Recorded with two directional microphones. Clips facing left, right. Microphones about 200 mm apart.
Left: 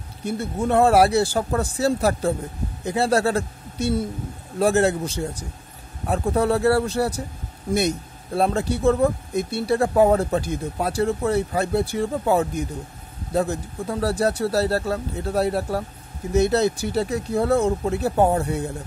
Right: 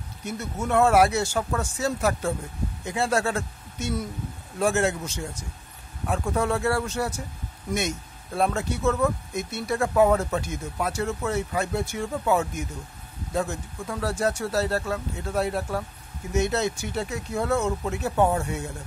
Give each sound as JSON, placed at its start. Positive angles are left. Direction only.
{"t": 0.2, "sound": "a man's voice", "side_deg": 30}